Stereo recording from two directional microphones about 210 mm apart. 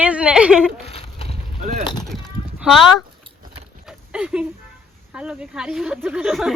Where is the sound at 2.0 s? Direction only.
Centre (ahead or behind).